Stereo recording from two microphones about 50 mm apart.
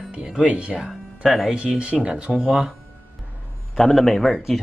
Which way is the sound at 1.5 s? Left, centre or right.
Centre.